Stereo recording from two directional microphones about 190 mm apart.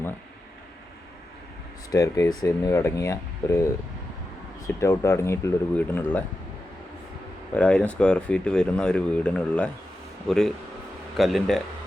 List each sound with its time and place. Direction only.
1.9 s speech: 20° left (ahead or behind)
4.6 s speech: 15° left (ahead or behind)
7.5 s speech: 5° left (ahead or behind)